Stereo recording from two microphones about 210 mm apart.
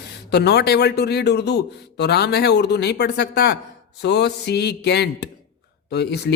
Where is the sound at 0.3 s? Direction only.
50° left (ahead or behind).